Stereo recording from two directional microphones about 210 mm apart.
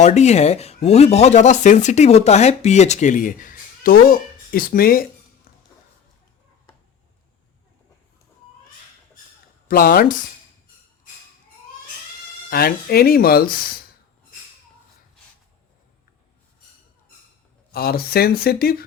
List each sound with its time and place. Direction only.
0.0 s speech: 35° left (ahead or behind)
5.5 s a sound: 45° left (ahead or behind)
9.6 s speech: 45° left (ahead or behind)
12.5 s speech: 45° left (ahead or behind)
17.7 s speech: 45° left (ahead or behind)